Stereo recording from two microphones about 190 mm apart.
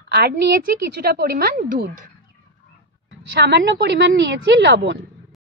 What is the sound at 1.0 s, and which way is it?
Speech, 55° right (ahead or behind).